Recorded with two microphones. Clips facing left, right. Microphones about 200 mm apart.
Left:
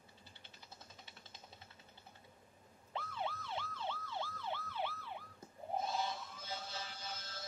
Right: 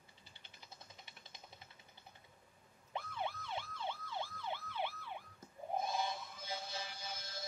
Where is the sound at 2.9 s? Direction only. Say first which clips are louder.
Even; 15° right (ahead or behind).